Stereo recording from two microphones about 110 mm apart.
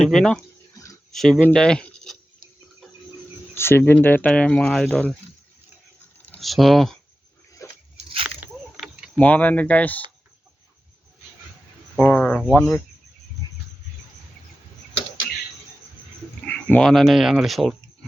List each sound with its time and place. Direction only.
0.0 s speech: 5° left (ahead or behind)
3.5 s speech: 20° left (ahead or behind)
6.4 s speech: centre (ahead or behind)
9.1 s speech: 15° left (ahead or behind)
11.9 s a sound: 5° left (ahead or behind)
12.5 s speech: 5° left (ahead or behind)
13.4 s a sound: 40° left (ahead or behind)
16.5 s a sound: 15° left (ahead or behind)
16.8 s speech: centre (ahead or behind)